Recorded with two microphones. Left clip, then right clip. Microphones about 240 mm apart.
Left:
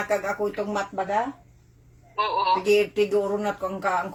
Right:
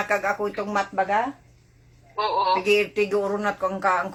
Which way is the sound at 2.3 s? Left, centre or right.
Right.